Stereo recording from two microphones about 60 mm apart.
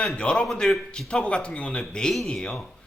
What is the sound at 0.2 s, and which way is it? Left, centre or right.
A man's voice, centre.